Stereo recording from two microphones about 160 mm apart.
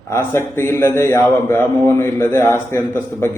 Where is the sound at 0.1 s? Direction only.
15° left (ahead or behind).